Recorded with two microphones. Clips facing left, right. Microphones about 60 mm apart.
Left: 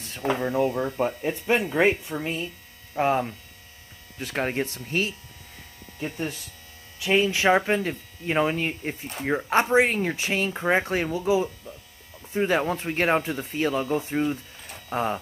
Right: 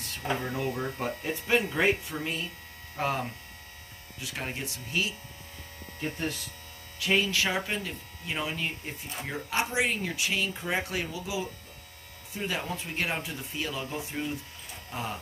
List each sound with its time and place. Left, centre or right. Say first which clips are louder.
0.4 s speech: left 8 dB; left
4.2 s speech: left 9 dB; left
7.0 s speech: left 4 dB; left
7.4 s speech: left 10 dB; left